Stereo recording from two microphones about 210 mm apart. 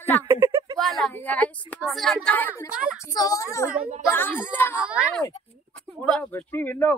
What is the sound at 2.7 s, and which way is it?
Speech, 5° right (ahead or behind).